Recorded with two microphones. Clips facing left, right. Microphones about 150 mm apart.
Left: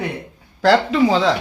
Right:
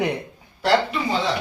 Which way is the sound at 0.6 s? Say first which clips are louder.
Left 6 dB; 90° left.